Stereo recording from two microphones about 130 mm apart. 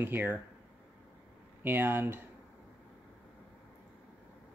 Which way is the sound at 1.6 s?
15° right (ahead or behind).